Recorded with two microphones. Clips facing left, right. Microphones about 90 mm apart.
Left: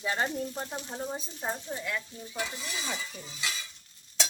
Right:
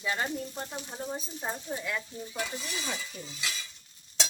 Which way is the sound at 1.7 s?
10° right (ahead or behind).